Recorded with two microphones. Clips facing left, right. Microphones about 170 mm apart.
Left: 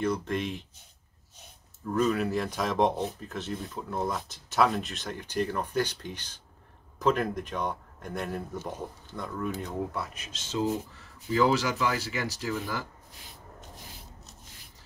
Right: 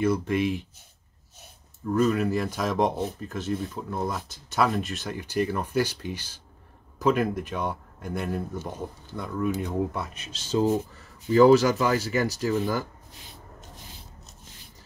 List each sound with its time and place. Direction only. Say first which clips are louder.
0.0 s speech: right 5 dB; 5° right (ahead or behind)
2.0 s speech: right 3 dB; centre (ahead or behind)
9.9 s speech: right 2 dB; 30° right (ahead or behind)
11.3 s speech: right 8 dB; 45° right (ahead or behind)